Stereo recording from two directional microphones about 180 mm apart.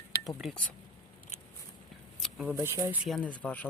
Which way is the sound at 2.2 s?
5° right (ahead or behind).